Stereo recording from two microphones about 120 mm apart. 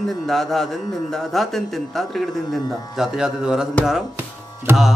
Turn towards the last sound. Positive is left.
turn(degrees=-15)  # may be behind; listen again after turning